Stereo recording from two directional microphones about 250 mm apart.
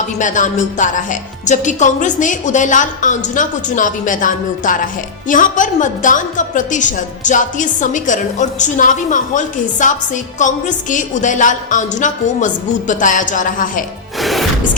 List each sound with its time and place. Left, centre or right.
0.2 s a woman's voice: left
14.2 s music: centre